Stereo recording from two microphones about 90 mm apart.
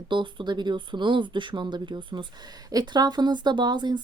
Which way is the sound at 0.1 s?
60° right (ahead or behind).